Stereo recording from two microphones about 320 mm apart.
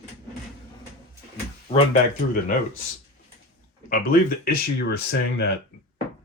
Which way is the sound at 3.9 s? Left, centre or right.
Left.